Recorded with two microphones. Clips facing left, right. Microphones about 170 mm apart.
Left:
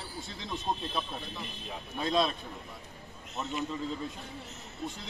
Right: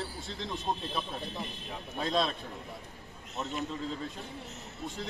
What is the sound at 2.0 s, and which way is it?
Speech, centre (ahead or behind).